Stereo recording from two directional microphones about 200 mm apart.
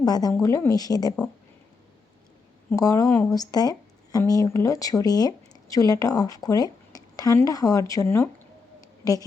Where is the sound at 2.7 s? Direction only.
15° left (ahead or behind).